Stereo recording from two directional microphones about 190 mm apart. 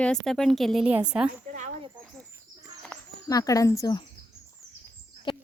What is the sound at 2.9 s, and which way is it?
Speech, 20° left (ahead or behind).